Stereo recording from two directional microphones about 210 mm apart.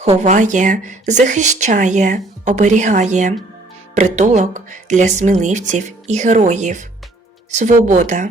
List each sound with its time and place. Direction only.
0.0 s a woman's voice: 35° right (ahead or behind)